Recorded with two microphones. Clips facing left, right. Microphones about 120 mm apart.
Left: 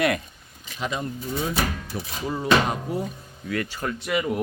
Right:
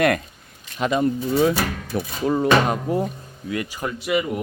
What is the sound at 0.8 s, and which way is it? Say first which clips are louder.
Speech: right 9 dB; 65° right (ahead or behind).